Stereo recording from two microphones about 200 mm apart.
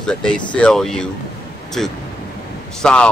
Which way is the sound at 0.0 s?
5° left (ahead or behind).